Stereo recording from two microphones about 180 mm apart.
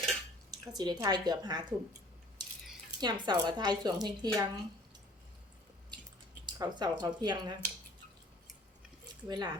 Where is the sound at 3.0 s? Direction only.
25° right (ahead or behind).